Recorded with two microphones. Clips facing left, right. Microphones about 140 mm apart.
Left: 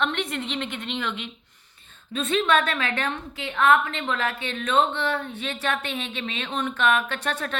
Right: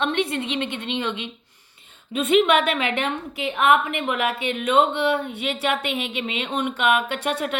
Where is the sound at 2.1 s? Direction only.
20° right (ahead or behind).